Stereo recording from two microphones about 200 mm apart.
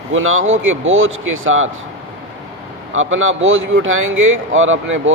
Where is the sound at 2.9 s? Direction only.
80° right.